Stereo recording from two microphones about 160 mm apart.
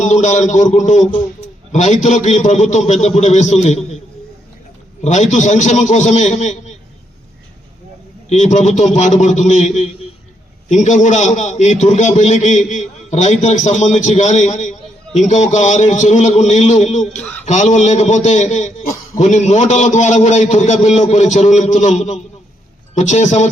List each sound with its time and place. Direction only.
0.0 s a man's voice: 50° left (ahead or behind)
5.0 s a man's voice: 45° left (ahead or behind)
8.3 s a man's voice: 50° left (ahead or behind)